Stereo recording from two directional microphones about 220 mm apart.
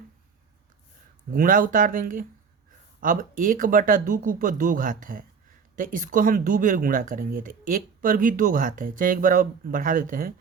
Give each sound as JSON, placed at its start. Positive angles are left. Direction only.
{"t": 1.3, "sound": "speech", "side_deg": -40}